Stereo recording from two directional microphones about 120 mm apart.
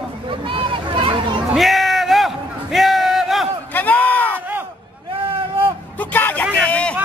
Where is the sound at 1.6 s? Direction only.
Centre (ahead or behind).